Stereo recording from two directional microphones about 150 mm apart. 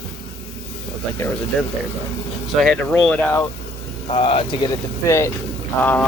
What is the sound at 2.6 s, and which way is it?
Speech, 5° left (ahead or behind).